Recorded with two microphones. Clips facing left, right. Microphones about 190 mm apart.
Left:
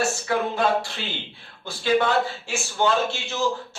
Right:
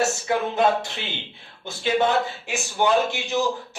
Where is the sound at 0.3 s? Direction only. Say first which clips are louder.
Right 1 dB; 20° right (ahead or behind).